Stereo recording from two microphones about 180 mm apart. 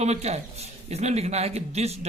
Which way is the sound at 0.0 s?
35° right (ahead or behind).